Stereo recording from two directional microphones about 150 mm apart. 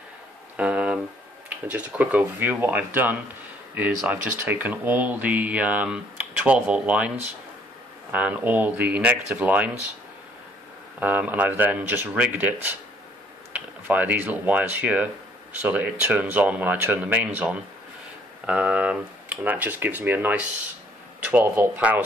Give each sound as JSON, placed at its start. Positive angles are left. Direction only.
{"t": 0.6, "sound": "a sound", "side_deg": -10}
{"t": 1.5, "sound": "speech", "side_deg": -10}
{"t": 8.1, "sound": "speech", "side_deg": -10}
{"t": 11.0, "sound": "speech", "side_deg": -10}